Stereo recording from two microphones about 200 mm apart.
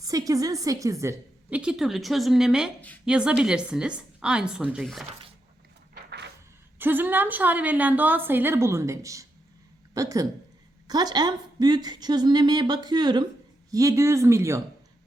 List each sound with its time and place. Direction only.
0.0 s a woman's voice: 15° right (ahead or behind); by 5.0 s centre (ahead or behind)
5.9 s a sound: 55° right (ahead or behind)
6.7 s a woman's voice: 10° right (ahead or behind)